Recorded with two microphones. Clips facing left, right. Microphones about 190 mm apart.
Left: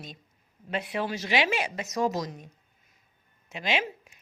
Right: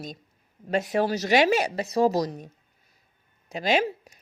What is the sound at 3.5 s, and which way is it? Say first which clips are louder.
Speech: right 6 dB; 40° right (ahead or behind).